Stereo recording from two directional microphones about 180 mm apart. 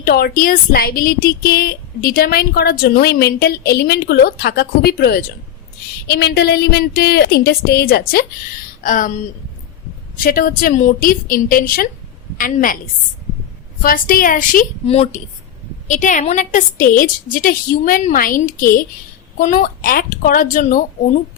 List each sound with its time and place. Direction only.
0.0 s a woman's voice: 55° left (ahead or behind)
10.2 s a woman's voice: 50° left (ahead or behind)
13.8 s a woman's voice: 50° left (ahead or behind)
14.8 s a woman's voice: 35° left (ahead or behind)